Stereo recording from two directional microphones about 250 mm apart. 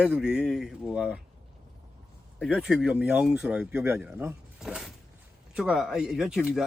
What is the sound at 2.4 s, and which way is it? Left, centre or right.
Speech, centre.